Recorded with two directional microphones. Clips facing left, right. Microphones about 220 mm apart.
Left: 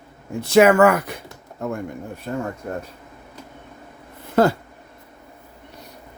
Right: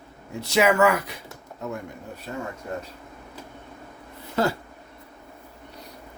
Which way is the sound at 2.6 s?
50° left (ahead or behind).